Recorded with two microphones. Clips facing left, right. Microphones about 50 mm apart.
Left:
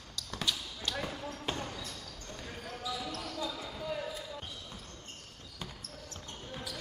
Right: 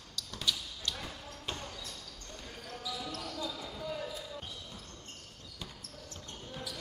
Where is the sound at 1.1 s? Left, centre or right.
Left.